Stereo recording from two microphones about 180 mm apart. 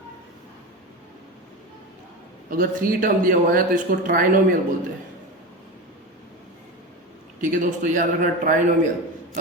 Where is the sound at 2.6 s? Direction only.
50° right (ahead or behind).